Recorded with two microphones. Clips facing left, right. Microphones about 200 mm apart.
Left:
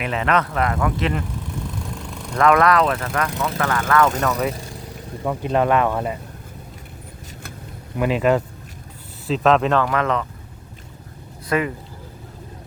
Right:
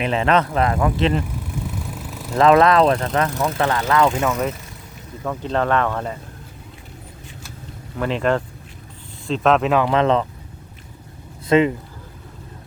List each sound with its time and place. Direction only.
0.0 s speech: 25° right (ahead or behind)
1.5 s vehicle: 5° right (ahead or behind)
2.3 s speech: 25° right (ahead or behind)
4.2 s speech: centre (ahead or behind)
5.2 s speech: 10° left (ahead or behind)
7.9 s speech: 10° left (ahead or behind)
9.8 s speech: 25° right (ahead or behind)
11.4 s speech: 25° right (ahead or behind)